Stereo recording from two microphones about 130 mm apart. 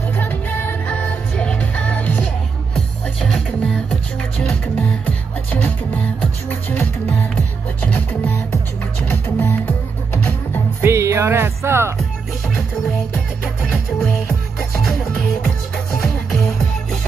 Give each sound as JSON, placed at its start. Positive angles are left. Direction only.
{"t": 0.2, "sound": "music", "side_deg": 15}
{"t": 10.8, "sound": "music", "side_deg": -20}